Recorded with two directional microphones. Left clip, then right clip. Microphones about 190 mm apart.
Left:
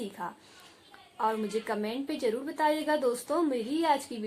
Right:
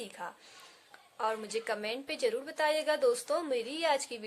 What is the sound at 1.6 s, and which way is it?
A woman's voice, 45° right (ahead or behind).